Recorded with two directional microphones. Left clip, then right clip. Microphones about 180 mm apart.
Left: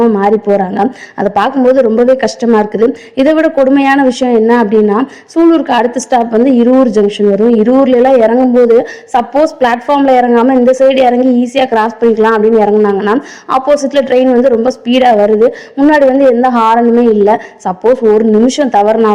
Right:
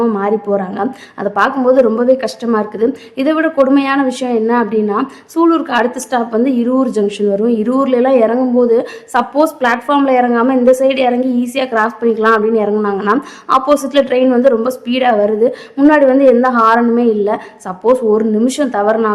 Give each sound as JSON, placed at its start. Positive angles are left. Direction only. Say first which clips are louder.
{"t": 0.0, "sound": "a woman's voice", "louder": "left 6 dB", "side_deg": 20}